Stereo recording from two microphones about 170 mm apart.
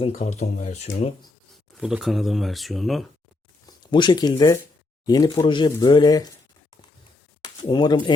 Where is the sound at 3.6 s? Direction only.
25° left (ahead or behind).